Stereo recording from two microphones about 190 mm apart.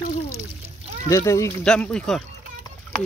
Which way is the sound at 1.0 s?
15° left (ahead or behind).